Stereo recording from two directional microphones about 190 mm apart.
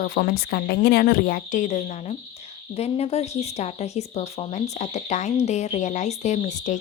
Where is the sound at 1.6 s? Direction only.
40° left (ahead or behind).